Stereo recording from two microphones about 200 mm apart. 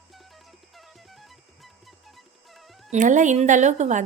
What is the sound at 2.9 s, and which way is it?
A woman's voice, 40° right (ahead or behind).